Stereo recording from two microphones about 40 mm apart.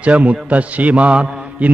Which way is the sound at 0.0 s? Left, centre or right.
Right.